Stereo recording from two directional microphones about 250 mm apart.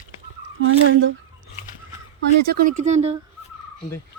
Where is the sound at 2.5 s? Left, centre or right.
Right.